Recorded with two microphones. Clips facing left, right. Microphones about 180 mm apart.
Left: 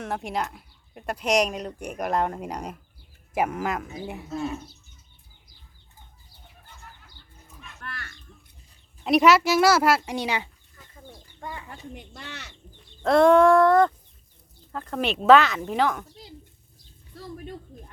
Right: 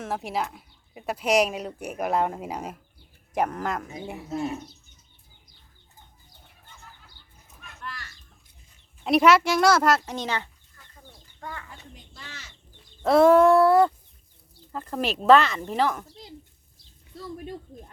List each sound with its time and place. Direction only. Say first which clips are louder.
0.0 s speech: even; centre (ahead or behind)
3.3 s speech: left 1 dB; 5° left (ahead or behind)
4.3 s speech: right 1 dB; 25° right (ahead or behind)
7.8 s a sound: right 1 dB; 60° left (ahead or behind)
9.0 s speech: even; centre (ahead or behind)
10.1 s chicken: left 2 dB; 10° left (ahead or behind)
11.7 s speech: left 7 dB; 65° left (ahead or behind)
13.0 s speech: even; 5° right (ahead or behind)